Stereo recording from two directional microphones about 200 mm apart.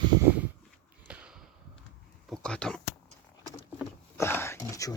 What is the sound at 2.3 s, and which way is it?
Speech, 5° left (ahead or behind).